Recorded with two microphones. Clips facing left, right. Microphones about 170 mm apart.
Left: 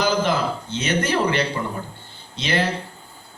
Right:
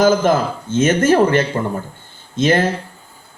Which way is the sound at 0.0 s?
45° right (ahead or behind).